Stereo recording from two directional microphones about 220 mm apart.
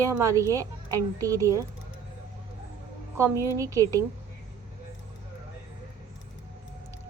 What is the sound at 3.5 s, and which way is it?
Speech, 15° right (ahead or behind).